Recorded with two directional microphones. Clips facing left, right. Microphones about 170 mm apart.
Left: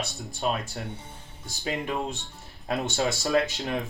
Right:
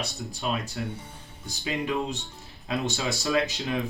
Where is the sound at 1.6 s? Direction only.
45° left (ahead or behind).